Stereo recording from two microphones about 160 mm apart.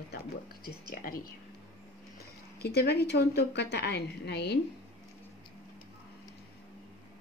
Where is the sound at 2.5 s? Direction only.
90° left.